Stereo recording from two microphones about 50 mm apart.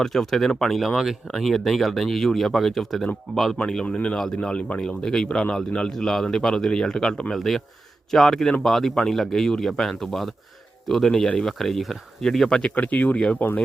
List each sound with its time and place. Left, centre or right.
0.0 s speech: centre
3.8 s a man's voice: centre
5.9 s a man's voice: centre
12.7 s speech: left